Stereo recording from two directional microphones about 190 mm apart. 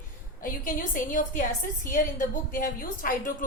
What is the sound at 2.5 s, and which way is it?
Speech, 50° left (ahead or behind).